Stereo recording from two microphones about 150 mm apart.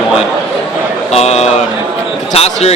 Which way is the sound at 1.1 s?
45° left (ahead or behind).